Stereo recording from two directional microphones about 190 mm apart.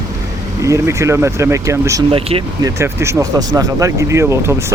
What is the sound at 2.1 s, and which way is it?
Speech, 30° right (ahead or behind).